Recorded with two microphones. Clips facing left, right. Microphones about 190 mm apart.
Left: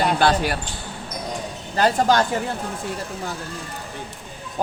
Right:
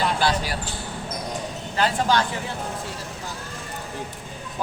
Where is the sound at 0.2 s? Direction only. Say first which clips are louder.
Left 5 dB; 55° left (ahead or behind).